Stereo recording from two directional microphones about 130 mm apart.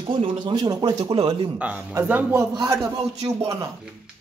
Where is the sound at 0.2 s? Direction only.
35° right (ahead or behind).